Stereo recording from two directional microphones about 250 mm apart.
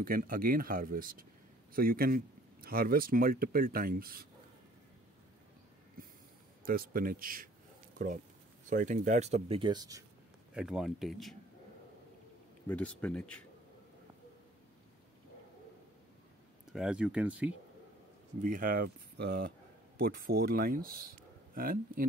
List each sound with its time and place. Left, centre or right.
0.0 s speech: right
6.6 s speech: right; by 10.0 s centre
10.5 s speech: centre
12.6 s speech: centre
16.7 s speech: centre
18.4 s speech: right